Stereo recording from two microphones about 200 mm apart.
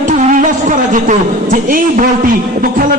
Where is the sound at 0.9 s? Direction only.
40° right (ahead or behind).